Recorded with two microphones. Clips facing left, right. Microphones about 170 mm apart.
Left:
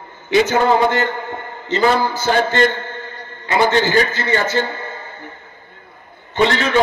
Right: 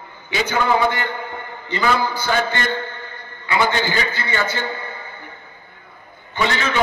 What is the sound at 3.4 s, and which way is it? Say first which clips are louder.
A man's voice: left 4 dB; 40° left (ahead or behind).